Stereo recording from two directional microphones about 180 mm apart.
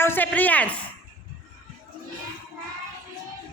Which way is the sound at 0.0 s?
10° left (ahead or behind).